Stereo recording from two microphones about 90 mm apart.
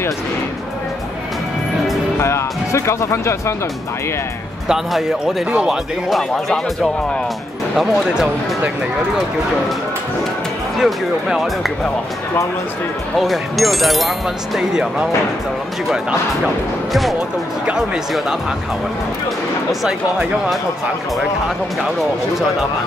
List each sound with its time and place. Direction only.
2.1 s speech: 30° left (ahead or behind)
4.6 s speech: 5° right (ahead or behind)
10.8 s speech: centre (ahead or behind)
13.2 s speech: centre (ahead or behind)
17.6 s speech: 5° right (ahead or behind)
19.7 s speech: 5° right (ahead or behind)